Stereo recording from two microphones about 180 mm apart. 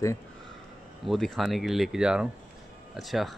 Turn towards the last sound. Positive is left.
turn(degrees=0)  # may be behind; listen again after turning